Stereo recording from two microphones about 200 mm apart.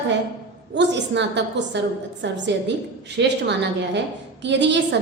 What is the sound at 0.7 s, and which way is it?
A woman's voice, 60° right (ahead or behind).